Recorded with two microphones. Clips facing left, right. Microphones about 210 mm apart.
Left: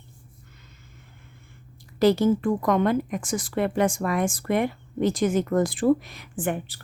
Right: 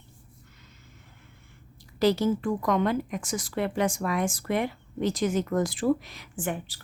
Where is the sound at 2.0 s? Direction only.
55° left (ahead or behind).